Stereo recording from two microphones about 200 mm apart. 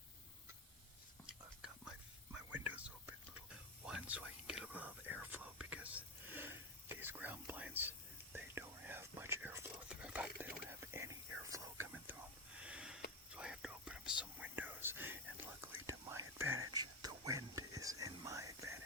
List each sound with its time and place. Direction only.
1.3 s whispering: 5° right (ahead or behind)
12.5 s sniff: 5° right (ahead or behind)
13.3 s whispering: 5° right (ahead or behind)